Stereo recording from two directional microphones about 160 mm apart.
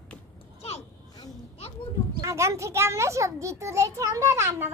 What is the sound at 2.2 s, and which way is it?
A child's voice, 20° right (ahead or behind).